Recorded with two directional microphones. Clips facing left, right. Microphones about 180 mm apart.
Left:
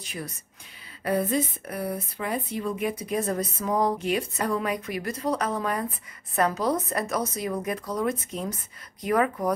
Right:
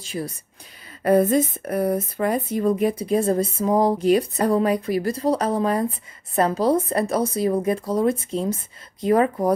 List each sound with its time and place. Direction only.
0.0 s speech: 30° right (ahead or behind)
1.0 s speech: 45° right (ahead or behind); by 9.5 s 30° right (ahead or behind)